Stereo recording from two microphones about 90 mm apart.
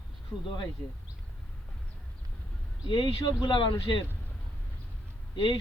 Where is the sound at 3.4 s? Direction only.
65° left (ahead or behind).